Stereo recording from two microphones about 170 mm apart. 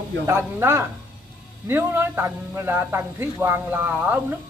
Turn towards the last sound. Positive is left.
turn(degrees=-10)  # may be behind; listen again after turning